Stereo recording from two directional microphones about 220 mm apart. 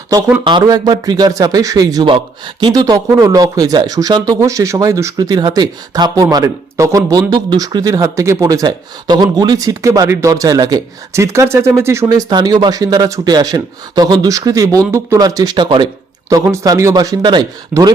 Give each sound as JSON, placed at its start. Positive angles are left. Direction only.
{"t": 0.1, "sound": "a man's voice", "side_deg": -10}